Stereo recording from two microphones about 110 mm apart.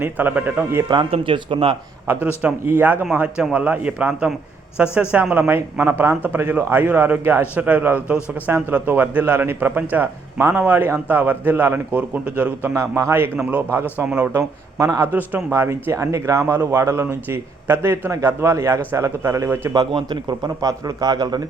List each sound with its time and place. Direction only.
0.0 s a man's voice: 15° right (ahead or behind)
1.1 s speech: 55° right (ahead or behind)
2.0 s a man's voice: 15° right (ahead or behind)
12.7 s a man's voice: 25° right (ahead or behind)
14.8 s speech: 30° right (ahead or behind)
15.1 s speech: 15° right (ahead or behind)
19.7 s a man's voice: 45° right (ahead or behind)